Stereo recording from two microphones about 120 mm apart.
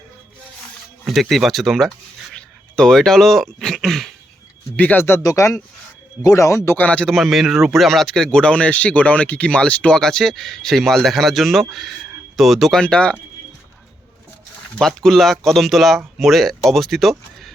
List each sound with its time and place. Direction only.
1.0 s a man's voice: centre (ahead or behind)
4.8 s a man's voice: 15° left (ahead or behind)
14.8 s a man's voice: centre (ahead or behind)